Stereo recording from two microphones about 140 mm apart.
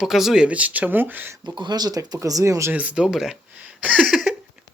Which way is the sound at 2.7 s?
10° right (ahead or behind).